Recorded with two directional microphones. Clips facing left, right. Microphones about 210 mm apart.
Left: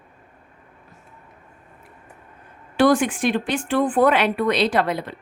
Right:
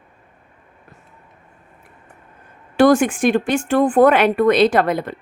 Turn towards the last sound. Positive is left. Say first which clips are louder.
# right 4 dB
turn(degrees=-50)  # may be behind; listen again after turning